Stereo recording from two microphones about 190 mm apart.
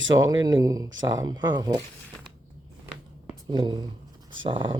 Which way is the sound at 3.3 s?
25° right (ahead or behind).